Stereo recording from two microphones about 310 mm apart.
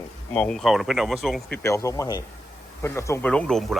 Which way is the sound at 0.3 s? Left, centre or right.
Centre.